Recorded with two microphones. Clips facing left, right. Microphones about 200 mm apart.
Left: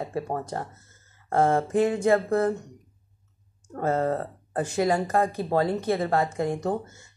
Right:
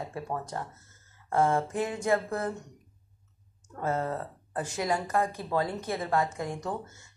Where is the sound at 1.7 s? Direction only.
30° left (ahead or behind).